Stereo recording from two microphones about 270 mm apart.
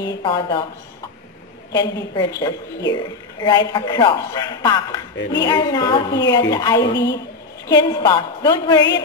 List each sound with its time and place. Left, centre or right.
0.0 s a man's voice: centre
1.8 s a man's voice: centre
5.1 s a woman's voice: left
5.4 s a man's voice: centre